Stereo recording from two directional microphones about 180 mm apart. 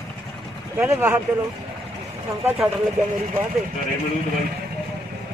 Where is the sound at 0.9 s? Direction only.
15° right (ahead or behind).